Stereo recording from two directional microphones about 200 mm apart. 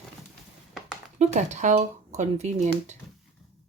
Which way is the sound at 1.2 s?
35° right (ahead or behind).